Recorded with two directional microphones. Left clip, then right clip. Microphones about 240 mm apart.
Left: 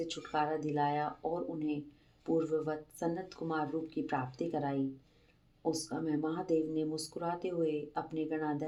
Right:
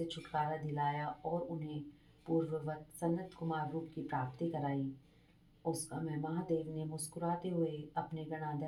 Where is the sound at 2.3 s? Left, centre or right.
Left.